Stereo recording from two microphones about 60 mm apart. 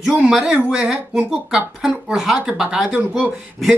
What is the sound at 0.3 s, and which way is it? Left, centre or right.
Speech, centre.